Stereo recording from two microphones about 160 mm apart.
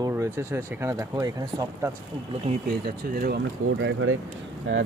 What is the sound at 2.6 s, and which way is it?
Speech, 65° right (ahead or behind).